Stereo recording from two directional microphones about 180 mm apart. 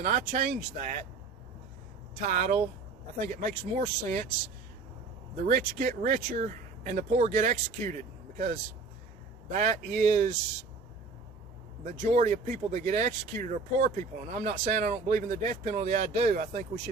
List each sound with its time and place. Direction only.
0.0 s speech: 40° right (ahead or behind)
2.2 s speech: 45° right (ahead or behind)
5.5 s speech: 45° right (ahead or behind)
11.8 s speech: 45° right (ahead or behind)